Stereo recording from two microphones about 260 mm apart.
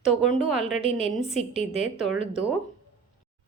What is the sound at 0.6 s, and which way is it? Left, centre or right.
Speech, right.